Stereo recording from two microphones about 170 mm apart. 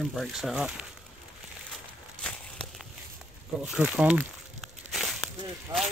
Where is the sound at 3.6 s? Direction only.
5° right (ahead or behind).